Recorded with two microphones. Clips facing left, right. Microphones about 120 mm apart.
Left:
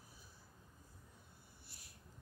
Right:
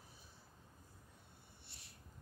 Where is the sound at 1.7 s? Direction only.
25° right (ahead or behind).